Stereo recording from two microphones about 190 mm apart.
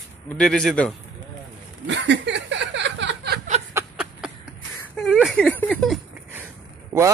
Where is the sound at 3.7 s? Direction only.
5° right (ahead or behind).